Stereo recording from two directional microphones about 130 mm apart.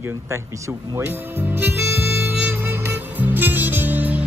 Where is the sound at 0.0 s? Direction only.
20° right (ahead or behind).